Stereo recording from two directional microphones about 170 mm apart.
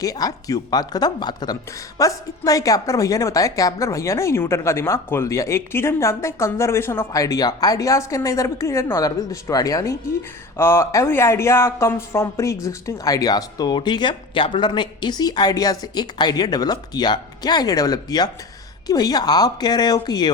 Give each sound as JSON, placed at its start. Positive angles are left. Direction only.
{"t": 0.0, "sound": "a woman's voice", "side_deg": 20}